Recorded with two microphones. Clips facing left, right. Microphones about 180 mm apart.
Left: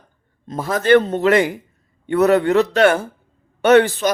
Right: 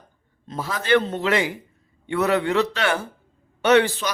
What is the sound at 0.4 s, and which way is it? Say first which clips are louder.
A man's voice: left 8 dB; 45° left (ahead or behind).